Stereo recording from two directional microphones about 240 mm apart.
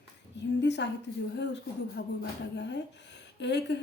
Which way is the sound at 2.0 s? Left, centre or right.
Left.